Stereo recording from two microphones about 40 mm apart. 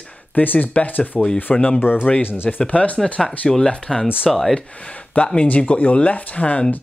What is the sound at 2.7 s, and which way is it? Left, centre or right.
Speech, left.